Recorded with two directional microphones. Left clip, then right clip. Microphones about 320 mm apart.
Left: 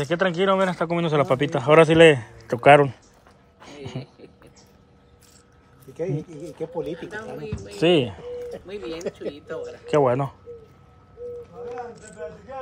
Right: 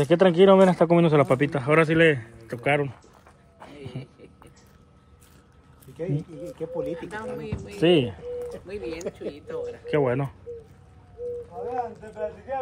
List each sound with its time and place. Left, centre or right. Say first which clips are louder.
0.0 s a man's voice: right 4 dB; centre
3.8 s a sound: left 6 dB; centre
5.9 s speech: left 3 dB; left
7.7 s a man's voice: left 1 dB; centre
12.2 s speech: right 4 dB; right